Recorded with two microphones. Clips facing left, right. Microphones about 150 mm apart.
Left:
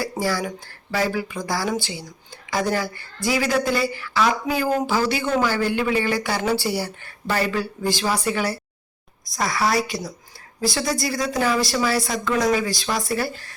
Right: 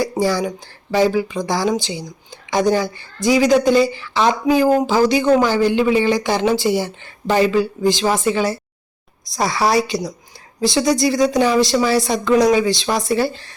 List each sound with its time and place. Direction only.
0.0 s speech: 25° right (ahead or behind)